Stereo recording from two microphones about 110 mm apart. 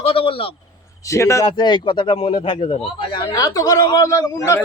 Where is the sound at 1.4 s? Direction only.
45° left (ahead or behind).